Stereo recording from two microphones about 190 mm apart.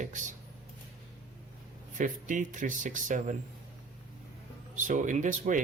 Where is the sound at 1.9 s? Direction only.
45° right (ahead or behind).